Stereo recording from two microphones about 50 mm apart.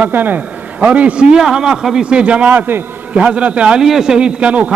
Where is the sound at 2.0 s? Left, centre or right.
Right.